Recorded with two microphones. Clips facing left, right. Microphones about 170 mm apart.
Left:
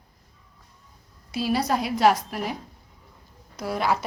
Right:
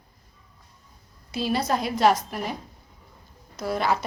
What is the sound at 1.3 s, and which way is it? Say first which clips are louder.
A woman's voice: left 1 dB; 5° left (ahead or behind).